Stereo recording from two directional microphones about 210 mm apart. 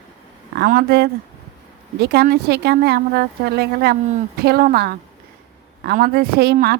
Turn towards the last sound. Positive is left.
turn(degrees=-50)  # may be behind; listen again after turning